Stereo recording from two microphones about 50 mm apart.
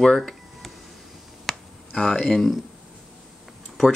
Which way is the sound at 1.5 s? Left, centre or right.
Centre.